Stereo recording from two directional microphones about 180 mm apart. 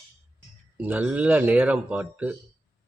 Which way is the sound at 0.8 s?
10° right (ahead or behind).